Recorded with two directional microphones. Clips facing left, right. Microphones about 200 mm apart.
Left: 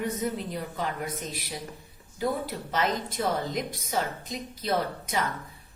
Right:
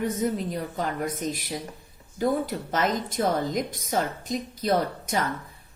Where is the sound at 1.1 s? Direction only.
50° right (ahead or behind).